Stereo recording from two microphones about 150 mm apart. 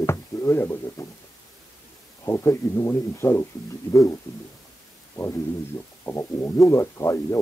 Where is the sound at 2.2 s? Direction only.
20° left (ahead or behind).